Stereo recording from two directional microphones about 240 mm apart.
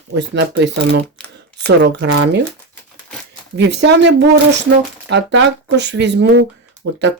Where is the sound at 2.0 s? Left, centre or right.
Right.